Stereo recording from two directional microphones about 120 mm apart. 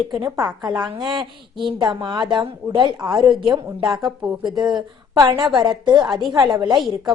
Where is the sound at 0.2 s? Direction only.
30° right (ahead or behind).